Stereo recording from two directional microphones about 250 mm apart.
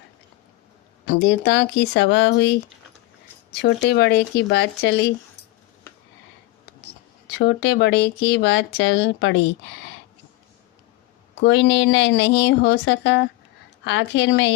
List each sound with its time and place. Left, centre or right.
1.0 s speech: left
3.6 s speech: left
7.3 s speech: left
11.3 s speech: left